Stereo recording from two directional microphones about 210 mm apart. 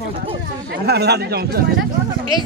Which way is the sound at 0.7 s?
50° right (ahead or behind).